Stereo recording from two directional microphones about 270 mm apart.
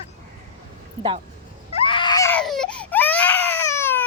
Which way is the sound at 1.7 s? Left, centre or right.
Centre.